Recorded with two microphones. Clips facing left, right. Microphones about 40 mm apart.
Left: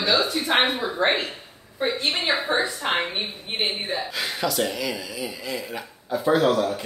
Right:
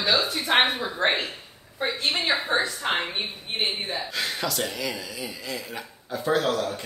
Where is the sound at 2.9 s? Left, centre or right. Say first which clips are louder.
Left 2 dB; centre.